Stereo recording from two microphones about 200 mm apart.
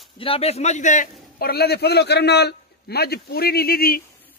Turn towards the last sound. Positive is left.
turn(degrees=50)  # may be behind; listen again after turning